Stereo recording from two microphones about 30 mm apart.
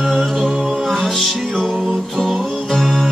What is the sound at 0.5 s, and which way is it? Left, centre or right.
Music, centre.